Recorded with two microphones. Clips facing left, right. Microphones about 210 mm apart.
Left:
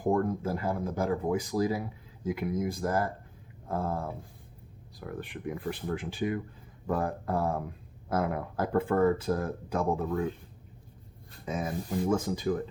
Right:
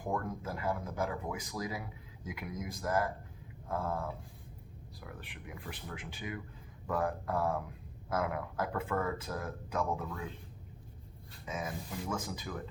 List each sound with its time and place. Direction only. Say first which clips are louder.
0.0 s speech: left 9 dB; 35° left (ahead or behind)
4.9 s speech: left 11 dB; 45° left (ahead or behind)
11.4 s speech: left 7 dB; 35° left (ahead or behind)